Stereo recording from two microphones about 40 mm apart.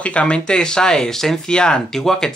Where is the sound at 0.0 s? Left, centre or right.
Left.